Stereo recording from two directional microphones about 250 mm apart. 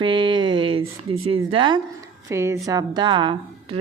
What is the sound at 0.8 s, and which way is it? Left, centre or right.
Speech, right.